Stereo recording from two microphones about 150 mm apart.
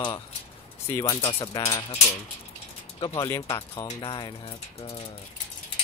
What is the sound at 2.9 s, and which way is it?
Speech, 35° left (ahead or behind).